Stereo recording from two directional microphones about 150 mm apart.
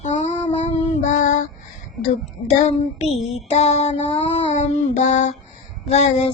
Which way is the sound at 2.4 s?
50° left (ahead or behind).